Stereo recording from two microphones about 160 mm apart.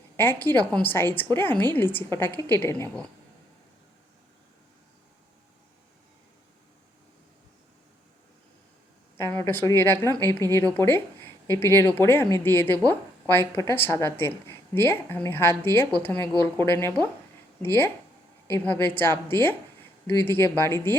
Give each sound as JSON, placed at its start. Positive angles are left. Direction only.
{"t": 0.2, "sound": "speech", "side_deg": 15}
{"t": 9.1, "sound": "a woman's voice", "side_deg": 15}